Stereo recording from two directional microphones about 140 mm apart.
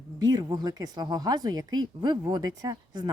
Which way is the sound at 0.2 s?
25° right (ahead or behind).